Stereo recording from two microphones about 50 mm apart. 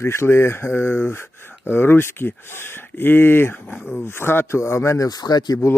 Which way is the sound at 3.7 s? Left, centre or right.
Left.